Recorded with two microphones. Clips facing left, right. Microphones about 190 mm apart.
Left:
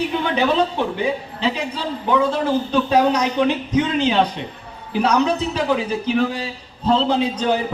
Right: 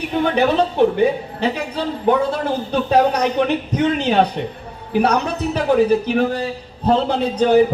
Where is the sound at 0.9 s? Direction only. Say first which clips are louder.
Right 5 dB; 55° right (ahead or behind).